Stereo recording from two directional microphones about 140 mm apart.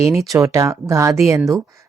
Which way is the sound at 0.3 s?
25° right (ahead or behind).